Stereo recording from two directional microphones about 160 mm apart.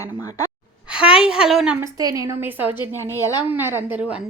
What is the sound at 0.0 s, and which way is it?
Speech, 20° left (ahead or behind).